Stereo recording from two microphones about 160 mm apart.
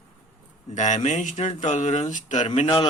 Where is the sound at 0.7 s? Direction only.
50° left (ahead or behind).